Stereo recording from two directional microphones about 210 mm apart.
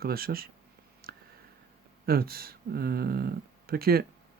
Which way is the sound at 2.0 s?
45° right (ahead or behind).